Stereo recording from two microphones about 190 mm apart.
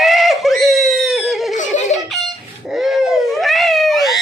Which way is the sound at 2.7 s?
Centre (ahead or behind).